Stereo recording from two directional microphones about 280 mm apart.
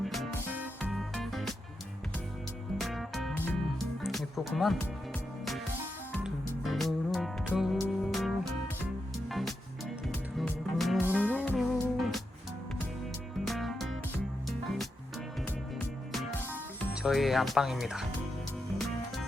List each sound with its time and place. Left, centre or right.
0.0 s music: centre
2.7 s music: centre
6.1 s music: centre
9.3 s music: centre
11.3 s music: centre
13.4 s music: centre
16.1 s music: centre